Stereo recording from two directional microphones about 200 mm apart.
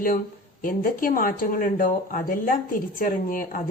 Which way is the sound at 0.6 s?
45° left (ahead or behind).